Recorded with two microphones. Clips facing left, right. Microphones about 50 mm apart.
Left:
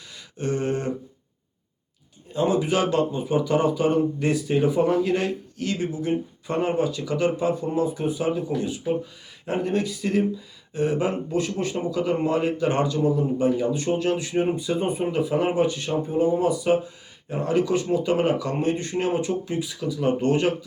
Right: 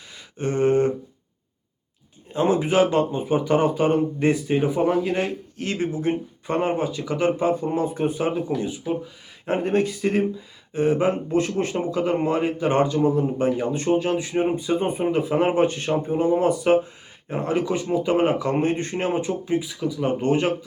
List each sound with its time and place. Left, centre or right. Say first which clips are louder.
0.3 s a sound: right 6 dB; right
2.3 s speech: right 2 dB; right; by 5.3 s centre
5.5 s speech: right 3 dB; right
6.6 s speech: left 1 dB; right
13.9 s speech: right 4 dB; right
19.3 s speech: right 2 dB; centre